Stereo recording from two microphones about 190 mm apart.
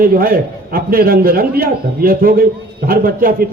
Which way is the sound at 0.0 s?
50° right (ahead or behind).